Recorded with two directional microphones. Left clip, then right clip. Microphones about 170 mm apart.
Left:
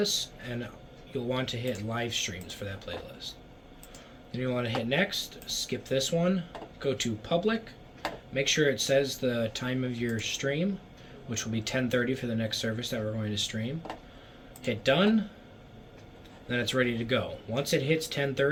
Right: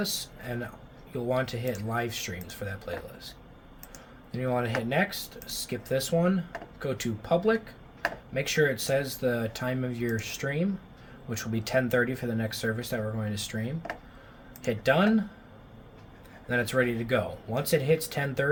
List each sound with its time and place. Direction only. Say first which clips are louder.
0.0 s speech: left 3 dB; 80° right
4.3 s speech: right 2 dB; 70° right (ahead or behind)
16.5 s speech: right 2 dB; 70° right (ahead or behind)